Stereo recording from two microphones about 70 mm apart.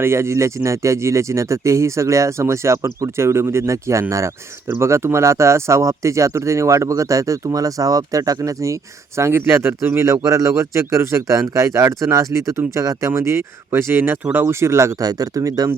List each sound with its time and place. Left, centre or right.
0.0 s speech: right
10.1 s speech: right
13.1 s speech: right
15.0 s speech: right